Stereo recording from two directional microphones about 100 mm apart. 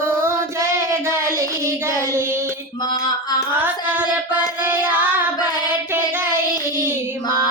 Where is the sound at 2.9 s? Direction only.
45° left (ahead or behind).